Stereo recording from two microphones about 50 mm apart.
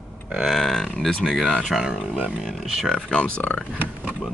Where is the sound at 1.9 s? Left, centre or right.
Centre.